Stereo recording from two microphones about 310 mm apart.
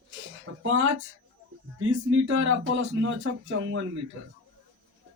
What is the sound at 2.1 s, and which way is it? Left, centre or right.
A man's voice, right.